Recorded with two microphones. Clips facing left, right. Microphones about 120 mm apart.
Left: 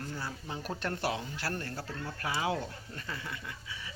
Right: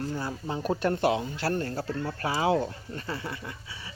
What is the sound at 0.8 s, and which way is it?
Speech, 20° right (ahead or behind).